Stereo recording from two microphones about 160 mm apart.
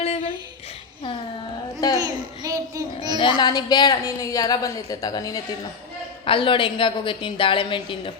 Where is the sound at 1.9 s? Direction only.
20° right (ahead or behind).